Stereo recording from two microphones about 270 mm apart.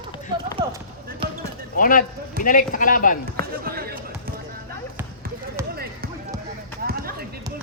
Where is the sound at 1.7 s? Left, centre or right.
Left.